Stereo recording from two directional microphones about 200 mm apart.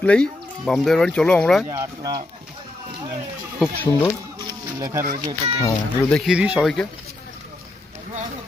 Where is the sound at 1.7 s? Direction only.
15° right (ahead or behind).